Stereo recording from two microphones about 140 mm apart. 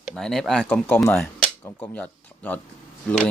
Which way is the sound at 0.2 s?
5° left (ahead or behind).